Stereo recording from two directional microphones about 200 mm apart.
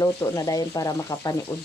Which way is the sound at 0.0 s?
15° left (ahead or behind).